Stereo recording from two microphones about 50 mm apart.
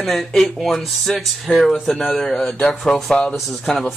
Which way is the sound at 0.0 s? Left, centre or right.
Centre.